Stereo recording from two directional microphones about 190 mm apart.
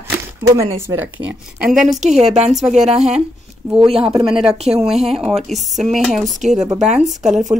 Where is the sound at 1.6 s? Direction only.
Centre (ahead or behind).